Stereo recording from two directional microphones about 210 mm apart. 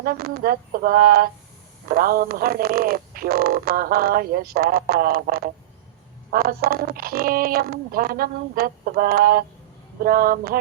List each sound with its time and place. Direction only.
0.0 s speech: 45° right (ahead or behind)